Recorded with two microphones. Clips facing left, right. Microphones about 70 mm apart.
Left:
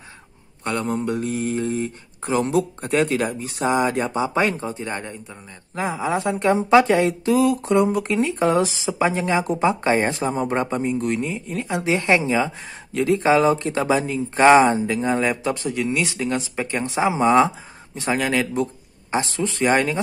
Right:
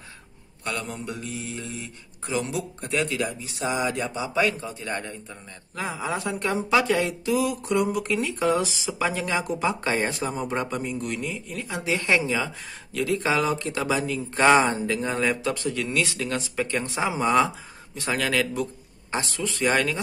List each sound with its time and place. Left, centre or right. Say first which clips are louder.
0.7 s speech: left 8 dB; left